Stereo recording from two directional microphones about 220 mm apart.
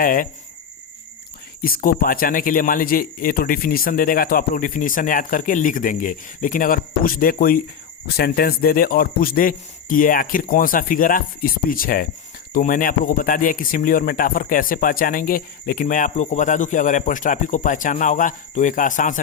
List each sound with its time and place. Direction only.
0.0 s speech: 40° left (ahead or behind)
1.6 s speech: 40° left (ahead or behind)